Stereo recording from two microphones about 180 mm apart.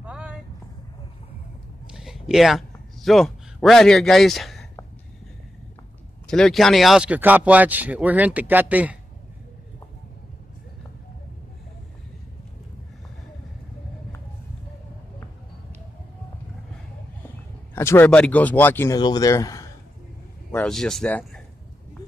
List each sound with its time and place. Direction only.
0.0 s vehicle: 5° right (ahead or behind)
1.9 s a sound: 5° right (ahead or behind)
6.2 s a man's voice: 5° left (ahead or behind)
17.7 s speech: 15° left (ahead or behind)
18.9 s speech: 25° left (ahead or behind)
20.5 s speech: 5° left (ahead or behind)